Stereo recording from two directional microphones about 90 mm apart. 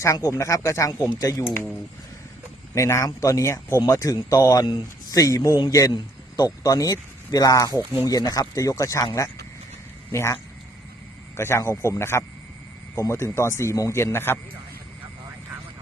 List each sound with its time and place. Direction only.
0.0 s speech: 35° left (ahead or behind)
2.7 s speech: 35° left (ahead or behind)
10.1 s speech: 35° left (ahead or behind)
11.3 s speech: 30° left (ahead or behind)